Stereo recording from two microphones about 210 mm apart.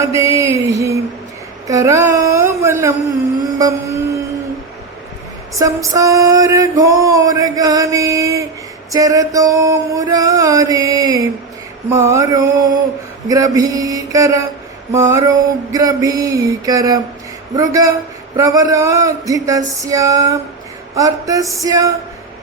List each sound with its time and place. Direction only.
0.0 s music: 15° right (ahead or behind)
1.6 s speech: 15° right (ahead or behind)
3.4 s music: 15° right (ahead or behind)
5.5 s music: 15° right (ahead or behind)
15.7 s music: 15° right (ahead or behind)